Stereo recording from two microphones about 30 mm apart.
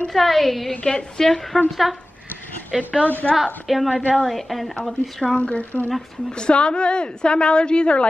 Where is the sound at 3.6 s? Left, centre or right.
Centre.